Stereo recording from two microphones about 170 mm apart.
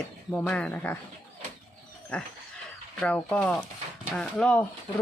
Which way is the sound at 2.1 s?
5° left (ahead or behind).